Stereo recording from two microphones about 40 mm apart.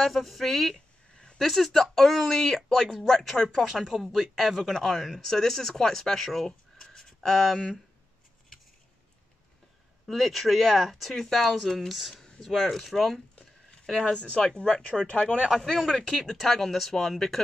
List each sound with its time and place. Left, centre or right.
0.0 s speech: centre
6.9 s a sound: centre
7.2 s speech: centre
10.0 s speech: centre
14.0 s speech: left
15.0 s speech: left
15.8 s speech: centre